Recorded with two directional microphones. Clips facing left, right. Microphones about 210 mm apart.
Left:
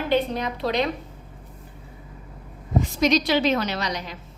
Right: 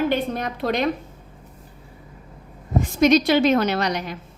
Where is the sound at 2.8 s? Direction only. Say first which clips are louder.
Right 5 dB; 55° right (ahead or behind).